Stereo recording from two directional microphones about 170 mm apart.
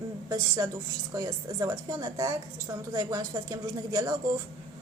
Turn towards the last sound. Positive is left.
turn(degrees=-20)  # may be behind; listen again after turning